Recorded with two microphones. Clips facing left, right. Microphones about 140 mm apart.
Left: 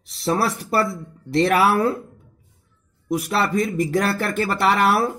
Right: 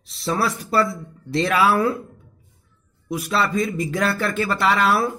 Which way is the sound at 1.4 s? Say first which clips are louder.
Left 1 dB; 55° left (ahead or behind).